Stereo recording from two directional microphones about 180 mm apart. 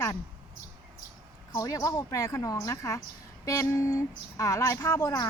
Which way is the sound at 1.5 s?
20° left (ahead or behind).